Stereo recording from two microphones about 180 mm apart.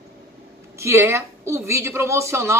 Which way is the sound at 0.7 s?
15° right (ahead or behind).